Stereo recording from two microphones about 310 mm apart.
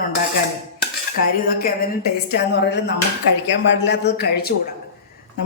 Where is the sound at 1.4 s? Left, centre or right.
Left.